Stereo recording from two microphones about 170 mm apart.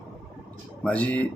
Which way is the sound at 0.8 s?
5° left (ahead or behind).